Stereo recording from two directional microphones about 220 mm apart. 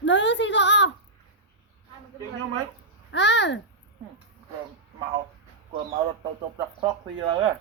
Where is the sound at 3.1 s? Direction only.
55° left (ahead or behind).